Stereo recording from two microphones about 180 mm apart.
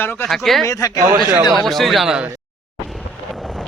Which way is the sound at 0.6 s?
20° left (ahead or behind).